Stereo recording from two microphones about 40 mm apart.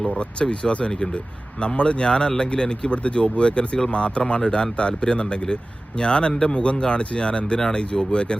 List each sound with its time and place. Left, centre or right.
0.2 s speech: left